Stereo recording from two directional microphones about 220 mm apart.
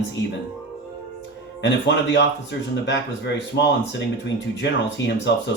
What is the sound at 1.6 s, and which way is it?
Speech, 50° left (ahead or behind).